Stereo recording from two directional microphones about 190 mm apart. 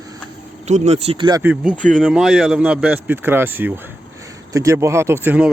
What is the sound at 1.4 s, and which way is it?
Speech, 5° right (ahead or behind).